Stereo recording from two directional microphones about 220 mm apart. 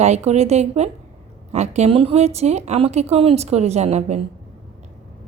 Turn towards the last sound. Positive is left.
turn(degrees=-30)  # may be behind; listen again after turning